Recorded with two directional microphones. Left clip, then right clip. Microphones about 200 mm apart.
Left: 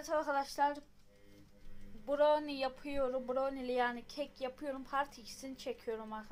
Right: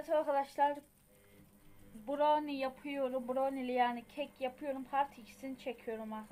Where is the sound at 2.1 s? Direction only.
Centre (ahead or behind).